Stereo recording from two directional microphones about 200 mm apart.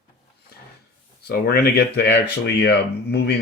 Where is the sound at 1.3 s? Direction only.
55° left (ahead or behind).